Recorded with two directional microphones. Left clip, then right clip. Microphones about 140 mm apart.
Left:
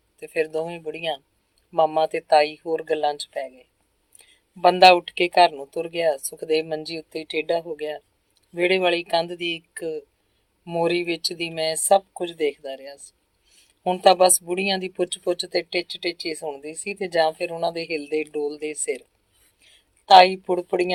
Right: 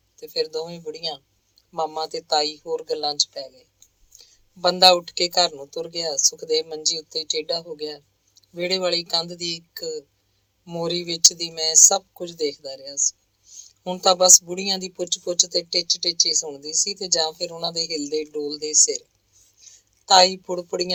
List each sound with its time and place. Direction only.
0.2 s speech: 35° right (ahead or behind)
20.1 s speech: 45° right (ahead or behind)